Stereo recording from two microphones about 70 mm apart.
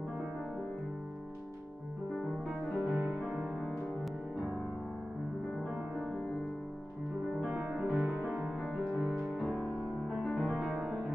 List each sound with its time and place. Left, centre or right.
2.9 s music: right
3.2 s music: centre
7.3 s music: centre
8.0 s music: right
9.4 s music: centre
10.1 s music: centre
10.6 s music: centre